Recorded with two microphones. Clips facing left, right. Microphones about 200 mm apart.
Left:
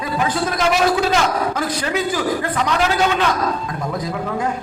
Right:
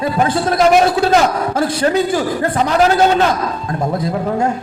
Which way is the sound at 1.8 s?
35° right (ahead or behind).